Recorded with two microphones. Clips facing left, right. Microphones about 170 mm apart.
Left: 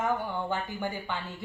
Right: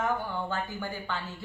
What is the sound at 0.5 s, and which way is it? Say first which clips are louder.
Speech: left 2 dB; 15° left (ahead or behind).